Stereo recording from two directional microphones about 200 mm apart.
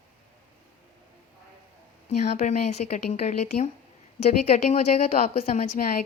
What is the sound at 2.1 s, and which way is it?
Speech, 35° left (ahead or behind).